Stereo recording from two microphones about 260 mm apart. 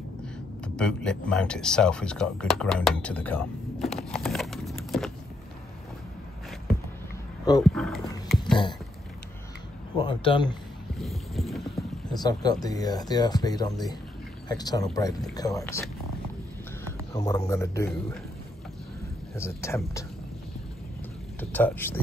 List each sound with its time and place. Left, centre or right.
0.7 s speech: centre
7.6 s speech: centre
9.9 s speech: centre
11.0 s boat: centre
12.2 s speech: centre
17.1 s speech: centre
19.3 s speech: centre
21.4 s speech: centre